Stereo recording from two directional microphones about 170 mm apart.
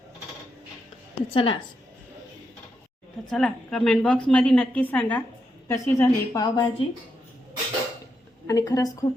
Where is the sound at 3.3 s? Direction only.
5° left (ahead or behind); by 6.6 s 20° left (ahead or behind).